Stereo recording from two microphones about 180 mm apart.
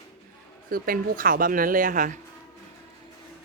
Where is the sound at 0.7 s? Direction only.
55° right (ahead or behind).